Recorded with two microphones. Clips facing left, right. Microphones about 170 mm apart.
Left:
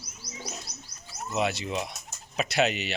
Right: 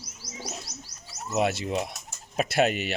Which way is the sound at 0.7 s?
45° right (ahead or behind).